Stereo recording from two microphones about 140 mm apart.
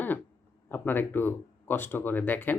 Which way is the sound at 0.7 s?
15° left (ahead or behind).